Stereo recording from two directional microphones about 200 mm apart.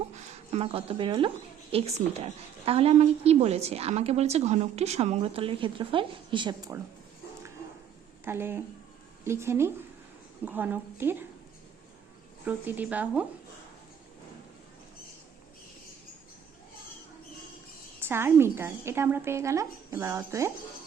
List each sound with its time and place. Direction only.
0.2 s a woman's voice: 30° right (ahead or behind)
8.2 s a woman's voice: 10° right (ahead or behind)
12.5 s a woman's voice: 10° right (ahead or behind)
18.0 s a woman's voice: 10° right (ahead or behind)